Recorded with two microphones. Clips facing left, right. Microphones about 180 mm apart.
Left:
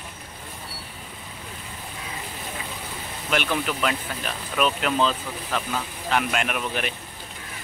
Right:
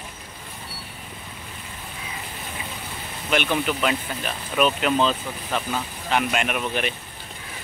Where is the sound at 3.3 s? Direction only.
Centre (ahead or behind).